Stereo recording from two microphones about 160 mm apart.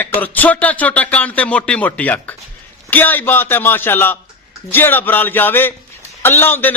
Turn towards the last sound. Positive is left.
turn(degrees=15)  # may be behind; listen again after turning